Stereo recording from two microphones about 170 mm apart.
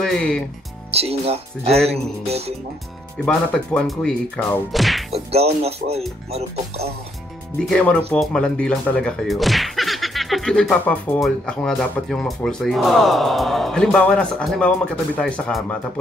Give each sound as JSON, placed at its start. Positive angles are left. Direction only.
{"t": 0.0, "sound": "speech", "side_deg": 5}
{"t": 0.9, "sound": "speech", "side_deg": -35}
{"t": 3.3, "sound": "speech", "side_deg": 5}
{"t": 5.1, "sound": "speech", "side_deg": -35}
{"t": 7.5, "sound": "speech", "side_deg": 5}